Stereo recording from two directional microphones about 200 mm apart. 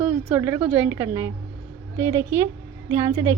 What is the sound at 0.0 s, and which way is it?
A woman's voice, 5° right (ahead or behind).